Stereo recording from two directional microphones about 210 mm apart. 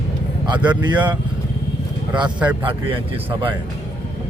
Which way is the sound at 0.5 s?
5° right (ahead or behind).